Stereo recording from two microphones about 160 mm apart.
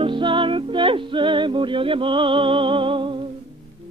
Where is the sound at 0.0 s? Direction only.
30° right (ahead or behind).